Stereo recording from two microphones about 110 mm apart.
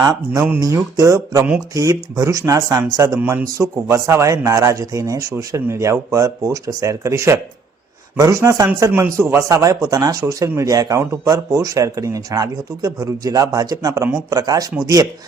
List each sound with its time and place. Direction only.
0.0 s speech: 35° right (ahead or behind)